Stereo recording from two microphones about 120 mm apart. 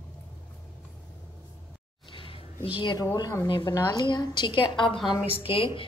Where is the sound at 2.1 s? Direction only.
50° left (ahead or behind).